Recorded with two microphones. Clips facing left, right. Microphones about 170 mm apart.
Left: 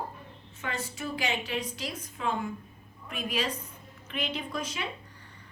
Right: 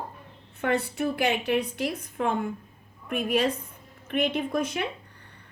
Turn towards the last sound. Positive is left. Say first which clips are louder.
# right 8 dB
turn(degrees=-55)  # may be behind; listen again after turning